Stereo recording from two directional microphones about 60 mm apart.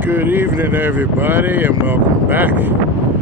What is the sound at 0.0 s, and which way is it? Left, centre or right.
Speech, right.